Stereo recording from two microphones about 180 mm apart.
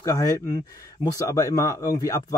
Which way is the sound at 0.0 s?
20° left (ahead or behind).